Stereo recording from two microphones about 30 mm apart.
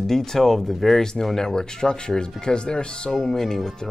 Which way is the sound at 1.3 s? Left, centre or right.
Left.